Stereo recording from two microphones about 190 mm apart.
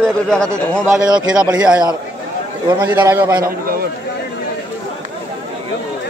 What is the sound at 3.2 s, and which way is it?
Speech, 20° right (ahead or behind).